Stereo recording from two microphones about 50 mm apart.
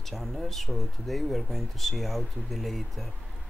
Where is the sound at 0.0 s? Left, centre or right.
Centre.